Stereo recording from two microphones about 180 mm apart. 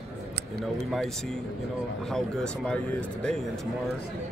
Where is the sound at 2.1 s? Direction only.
5° left (ahead or behind).